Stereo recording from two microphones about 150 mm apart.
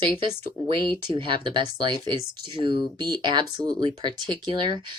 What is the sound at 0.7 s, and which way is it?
Speech, 35° right (ahead or behind).